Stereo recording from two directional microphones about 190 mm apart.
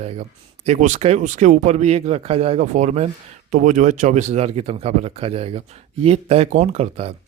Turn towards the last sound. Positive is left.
turn(degrees=-35)  # may be behind; listen again after turning